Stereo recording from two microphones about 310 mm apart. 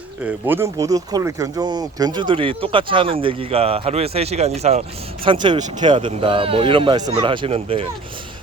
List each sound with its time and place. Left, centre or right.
0.3 s speech: centre